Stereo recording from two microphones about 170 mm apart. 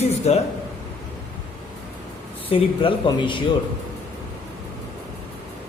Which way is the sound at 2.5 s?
30° left (ahead or behind).